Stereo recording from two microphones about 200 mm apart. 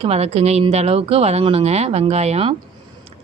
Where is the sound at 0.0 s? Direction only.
30° right (ahead or behind).